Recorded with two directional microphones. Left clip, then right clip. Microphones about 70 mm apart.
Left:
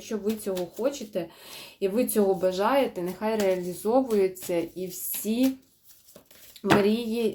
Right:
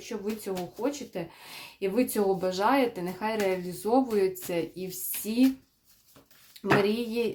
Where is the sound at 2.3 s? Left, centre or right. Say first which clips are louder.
Left 2 dB; right.